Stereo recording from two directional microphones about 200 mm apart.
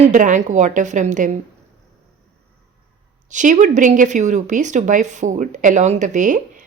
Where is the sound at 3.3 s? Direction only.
40° right (ahead or behind).